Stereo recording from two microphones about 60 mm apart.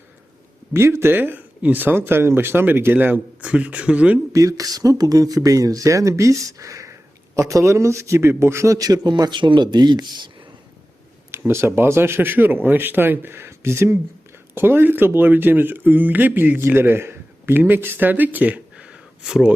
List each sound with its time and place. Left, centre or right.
0.7 s speech: right
3.4 s speech: right
4.3 s speech: right
8.2 s speech: right
8.7 s a man's voice: right
11.3 s speech: right
19.2 s speech: centre